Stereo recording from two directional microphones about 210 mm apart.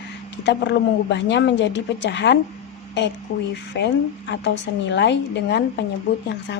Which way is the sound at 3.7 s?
55° left (ahead or behind).